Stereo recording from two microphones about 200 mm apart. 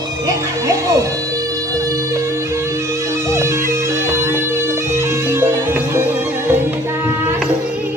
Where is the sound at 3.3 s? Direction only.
15° right (ahead or behind).